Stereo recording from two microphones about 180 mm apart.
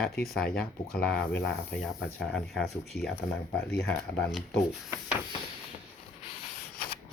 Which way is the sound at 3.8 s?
10° left (ahead or behind).